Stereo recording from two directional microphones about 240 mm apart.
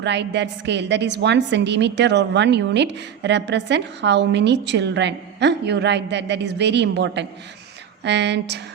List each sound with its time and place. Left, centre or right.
0.0 s a woman's voice: right